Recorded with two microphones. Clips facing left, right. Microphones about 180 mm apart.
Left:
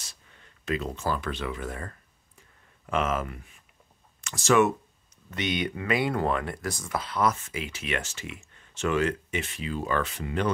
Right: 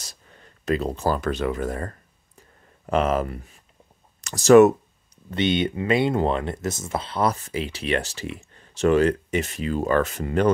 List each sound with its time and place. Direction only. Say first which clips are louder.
0.0 s a sound: right 6 dB; 40° right (ahead or behind)
2.9 s speech: right 6 dB; 35° right (ahead or behind)
5.3 s speech: right 7 dB; 30° right (ahead or behind); by 10.5 s 45° right (ahead or behind)